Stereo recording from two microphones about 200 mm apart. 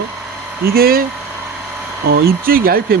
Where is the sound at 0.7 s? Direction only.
50° right (ahead or behind).